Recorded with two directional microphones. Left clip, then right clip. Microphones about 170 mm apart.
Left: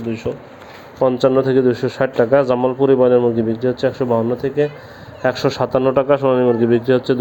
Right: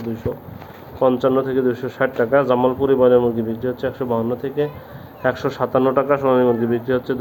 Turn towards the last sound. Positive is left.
turn(degrees=45)  # may be behind; listen again after turning